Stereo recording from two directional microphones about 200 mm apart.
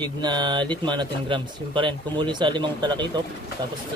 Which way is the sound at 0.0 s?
20° right (ahead or behind).